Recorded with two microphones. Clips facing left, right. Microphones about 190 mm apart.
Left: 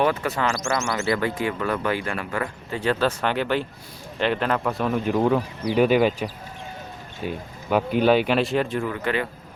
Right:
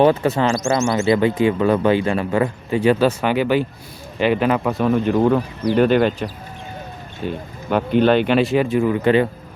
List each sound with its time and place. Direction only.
0.0 s speech: 25° right (ahead or behind); by 8.9 s 5° right (ahead or behind)
8.9 s speech: 25° right (ahead or behind)